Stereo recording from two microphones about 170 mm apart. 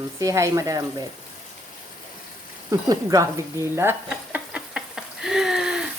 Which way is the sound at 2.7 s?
20° right (ahead or behind).